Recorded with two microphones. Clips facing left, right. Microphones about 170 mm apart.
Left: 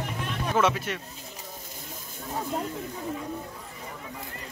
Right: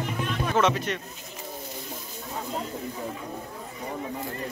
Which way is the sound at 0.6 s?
10° left (ahead or behind).